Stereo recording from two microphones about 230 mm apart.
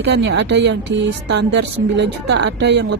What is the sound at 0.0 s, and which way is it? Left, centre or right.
A woman's voice, right.